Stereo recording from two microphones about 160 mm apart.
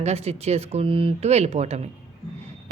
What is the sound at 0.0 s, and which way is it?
A woman's voice, 40° right (ahead or behind).